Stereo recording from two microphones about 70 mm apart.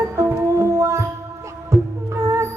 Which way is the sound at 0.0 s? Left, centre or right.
Right.